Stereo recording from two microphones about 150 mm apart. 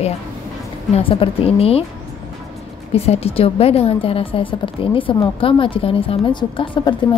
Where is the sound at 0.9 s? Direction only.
35° left (ahead or behind).